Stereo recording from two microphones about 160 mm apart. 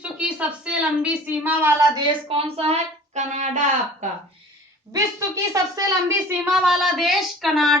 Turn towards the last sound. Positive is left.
turn(degrees=0)  # may be behind; listen again after turning